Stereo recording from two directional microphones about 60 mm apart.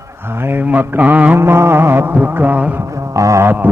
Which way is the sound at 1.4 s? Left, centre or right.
Right.